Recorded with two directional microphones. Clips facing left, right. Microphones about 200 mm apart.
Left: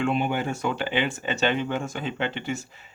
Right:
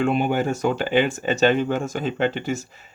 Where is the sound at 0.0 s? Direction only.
45° right (ahead or behind).